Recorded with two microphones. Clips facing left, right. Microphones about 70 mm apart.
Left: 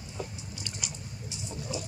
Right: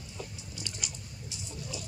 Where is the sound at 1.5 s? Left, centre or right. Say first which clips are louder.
Left 6 dB; centre.